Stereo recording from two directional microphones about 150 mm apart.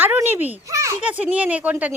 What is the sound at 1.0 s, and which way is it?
Speech, 10° right (ahead or behind).